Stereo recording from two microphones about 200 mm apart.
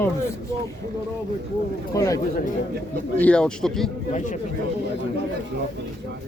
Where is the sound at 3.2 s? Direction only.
5° left (ahead or behind).